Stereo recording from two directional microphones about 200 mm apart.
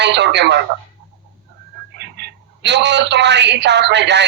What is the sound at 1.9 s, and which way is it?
A man's voice, 60° right (ahead or behind).